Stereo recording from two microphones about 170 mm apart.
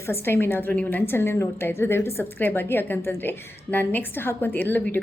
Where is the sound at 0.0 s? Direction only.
15° left (ahead or behind).